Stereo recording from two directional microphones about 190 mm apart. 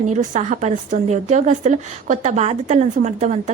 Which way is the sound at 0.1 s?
35° right (ahead or behind).